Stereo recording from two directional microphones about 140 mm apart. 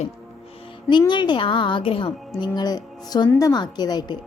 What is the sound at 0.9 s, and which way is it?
A woman's voice, 35° left (ahead or behind).